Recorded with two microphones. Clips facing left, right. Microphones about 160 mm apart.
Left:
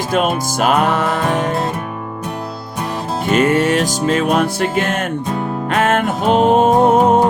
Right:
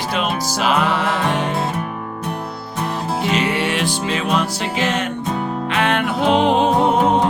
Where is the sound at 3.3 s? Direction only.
45° left (ahead or behind).